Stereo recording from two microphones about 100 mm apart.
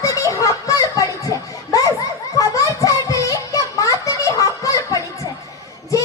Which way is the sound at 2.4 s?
35° left (ahead or behind).